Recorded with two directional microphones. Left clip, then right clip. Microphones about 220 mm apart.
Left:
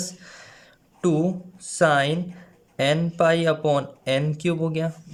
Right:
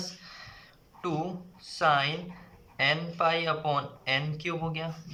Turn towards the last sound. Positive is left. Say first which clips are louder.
# left 8 dB
turn(degrees=55)  # may be behind; listen again after turning